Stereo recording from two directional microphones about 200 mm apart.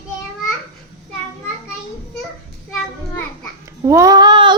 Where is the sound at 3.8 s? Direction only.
15° right (ahead or behind).